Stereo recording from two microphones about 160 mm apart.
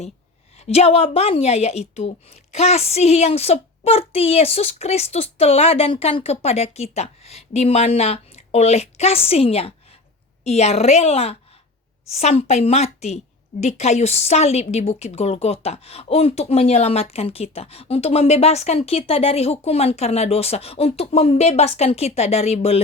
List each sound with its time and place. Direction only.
0.6 s a woman's voice: 40° left (ahead or behind)